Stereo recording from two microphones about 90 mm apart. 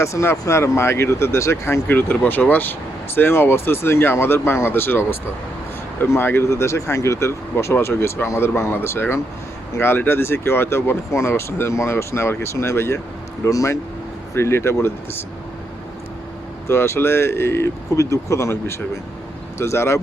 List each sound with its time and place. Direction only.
0.0 s speech: 30° left (ahead or behind)
1.9 s speech: 20° left (ahead or behind)
16.6 s speech: 30° left (ahead or behind)